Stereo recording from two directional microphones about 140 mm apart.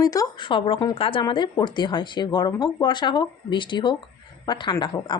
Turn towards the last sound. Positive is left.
turn(degrees=30)  # may be behind; listen again after turning